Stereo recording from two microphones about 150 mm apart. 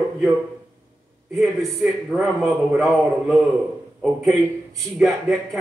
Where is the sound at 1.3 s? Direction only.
Centre (ahead or behind).